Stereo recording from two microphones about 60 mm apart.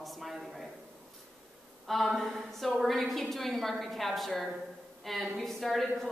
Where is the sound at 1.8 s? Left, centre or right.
Centre.